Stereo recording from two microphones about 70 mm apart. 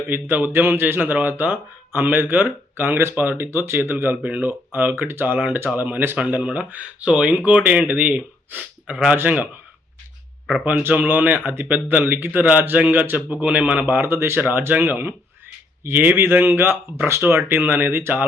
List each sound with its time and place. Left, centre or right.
0.1 s a man's voice: right
6.1 s a man's voice: centre
10.4 s speech: centre
10.8 s a man's voice: right